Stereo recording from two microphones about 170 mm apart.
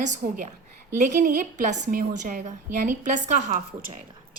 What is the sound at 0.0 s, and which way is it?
A woman's voice, 45° right (ahead or behind).